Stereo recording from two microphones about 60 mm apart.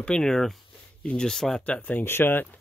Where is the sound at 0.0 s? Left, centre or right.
Centre.